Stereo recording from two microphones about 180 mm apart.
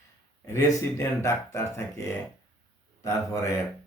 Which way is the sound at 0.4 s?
15° left (ahead or behind).